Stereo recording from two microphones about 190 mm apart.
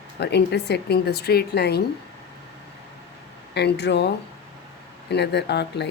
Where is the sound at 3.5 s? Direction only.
60° left (ahead or behind).